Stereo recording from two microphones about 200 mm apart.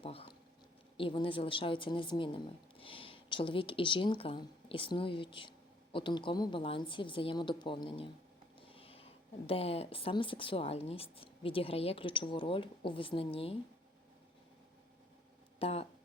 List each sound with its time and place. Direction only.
0.0 s speech: 30° left (ahead or behind)
15.5 s speech: 30° left (ahead or behind)